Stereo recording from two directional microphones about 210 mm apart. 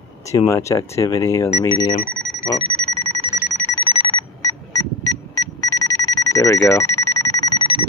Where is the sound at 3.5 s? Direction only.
10° left (ahead or behind).